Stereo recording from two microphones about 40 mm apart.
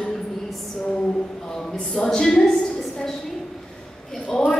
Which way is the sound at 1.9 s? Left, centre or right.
Centre.